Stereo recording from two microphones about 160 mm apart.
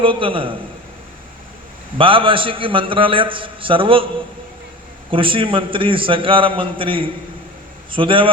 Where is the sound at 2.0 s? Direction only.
35° right (ahead or behind).